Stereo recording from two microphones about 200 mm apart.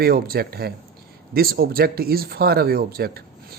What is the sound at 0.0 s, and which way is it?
Speech, 50° right (ahead or behind).